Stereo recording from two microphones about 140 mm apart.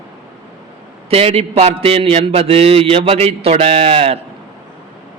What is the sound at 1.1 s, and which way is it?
A man's voice, 45° right (ahead or behind).